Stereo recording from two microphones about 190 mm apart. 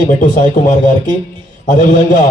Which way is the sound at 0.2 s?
40° left (ahead or behind).